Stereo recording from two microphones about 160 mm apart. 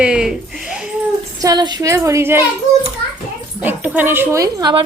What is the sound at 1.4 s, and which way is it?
A woman's voice, 25° right (ahead or behind).